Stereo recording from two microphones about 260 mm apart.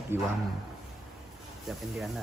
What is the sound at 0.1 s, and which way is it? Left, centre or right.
Speech, centre.